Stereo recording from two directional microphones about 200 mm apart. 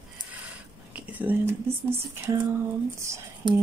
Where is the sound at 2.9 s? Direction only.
15° right (ahead or behind).